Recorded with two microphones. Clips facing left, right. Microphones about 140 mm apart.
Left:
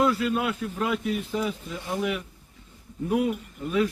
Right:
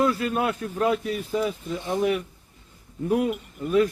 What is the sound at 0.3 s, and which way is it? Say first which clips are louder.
Speech: right 1 dB; 45° right (ahead or behind).